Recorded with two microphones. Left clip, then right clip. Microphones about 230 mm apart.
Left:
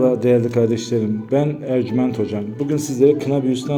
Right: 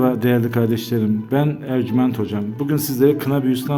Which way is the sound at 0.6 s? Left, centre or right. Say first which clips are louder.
Left 3 dB; right.